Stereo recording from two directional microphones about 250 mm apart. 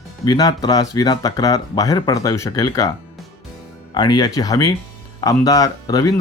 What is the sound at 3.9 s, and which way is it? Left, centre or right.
Speech, centre.